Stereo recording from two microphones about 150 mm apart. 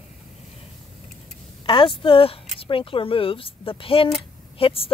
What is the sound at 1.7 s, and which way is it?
A woman's voice, 35° left (ahead or behind).